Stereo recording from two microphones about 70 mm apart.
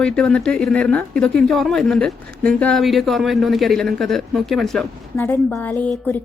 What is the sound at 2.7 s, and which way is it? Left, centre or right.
Speech, centre.